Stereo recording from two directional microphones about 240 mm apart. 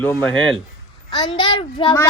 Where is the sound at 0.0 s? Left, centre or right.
Centre.